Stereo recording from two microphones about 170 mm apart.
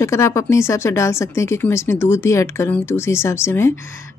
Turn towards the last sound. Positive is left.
turn(degrees=15)  # may be behind; listen again after turning